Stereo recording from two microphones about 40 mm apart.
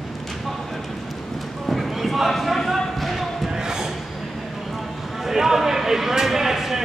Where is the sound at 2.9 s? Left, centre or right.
Centre.